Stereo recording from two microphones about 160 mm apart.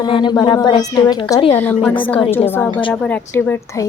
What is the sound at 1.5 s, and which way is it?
A woman's voice, 10° left (ahead or behind).